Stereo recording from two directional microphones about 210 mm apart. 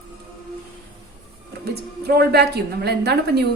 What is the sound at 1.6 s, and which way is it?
Speech, 50° right (ahead or behind).